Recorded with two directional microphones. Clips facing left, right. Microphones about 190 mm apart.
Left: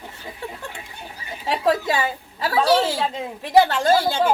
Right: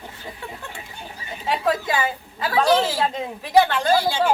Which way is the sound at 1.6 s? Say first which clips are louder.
Left 3 dB; 30° left (ahead or behind).